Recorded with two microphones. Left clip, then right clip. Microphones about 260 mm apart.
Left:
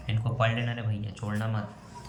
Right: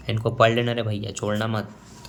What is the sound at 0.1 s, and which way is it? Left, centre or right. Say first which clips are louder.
Speech: right 10 dB; right.